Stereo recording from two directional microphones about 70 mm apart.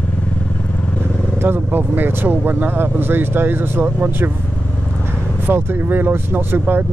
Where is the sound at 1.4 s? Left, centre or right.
Right.